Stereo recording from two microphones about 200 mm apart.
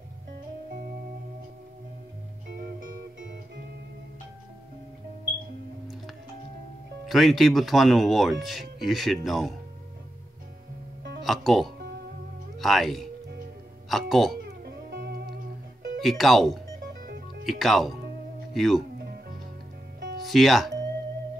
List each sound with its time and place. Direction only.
7.1 s speech: centre (ahead or behind)
11.2 s speech: centre (ahead or behind)
14.6 s music: 50° right (ahead or behind)
16.0 s speech: centre (ahead or behind)
17.0 s music: 45° right (ahead or behind)
17.5 s speech: centre (ahead or behind)
18.9 s music: 50° right (ahead or behind)
20.2 s speech: centre (ahead or behind)